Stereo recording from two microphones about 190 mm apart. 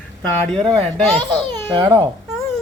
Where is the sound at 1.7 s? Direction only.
20° right (ahead or behind).